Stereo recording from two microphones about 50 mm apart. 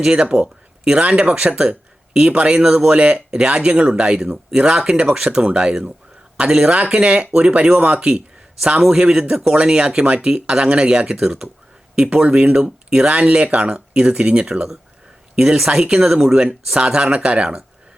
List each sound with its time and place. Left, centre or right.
0.0 s speech: centre
6.7 s speech: right
12.6 s speech: centre
13.1 s speech: right